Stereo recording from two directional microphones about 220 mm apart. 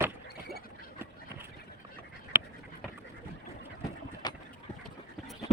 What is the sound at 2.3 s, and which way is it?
Dog, 10° right (ahead or behind).